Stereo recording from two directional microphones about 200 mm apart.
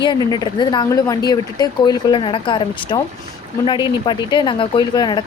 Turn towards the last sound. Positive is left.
turn(degrees=20)  # may be behind; listen again after turning